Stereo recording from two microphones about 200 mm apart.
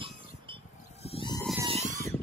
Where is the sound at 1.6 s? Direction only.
30° right (ahead or behind).